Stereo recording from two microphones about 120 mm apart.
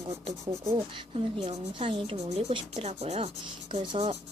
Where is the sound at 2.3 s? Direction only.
65° right (ahead or behind).